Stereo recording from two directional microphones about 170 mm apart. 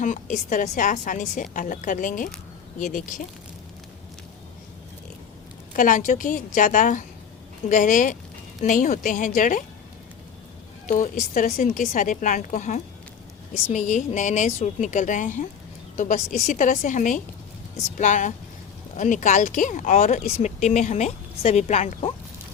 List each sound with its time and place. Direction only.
0.0 s speech: 50° left (ahead or behind)
5.7 s speech: 50° left (ahead or behind)
10.8 s speech: 50° left (ahead or behind)